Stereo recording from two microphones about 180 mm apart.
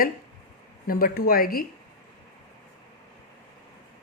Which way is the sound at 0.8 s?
55° left (ahead or behind).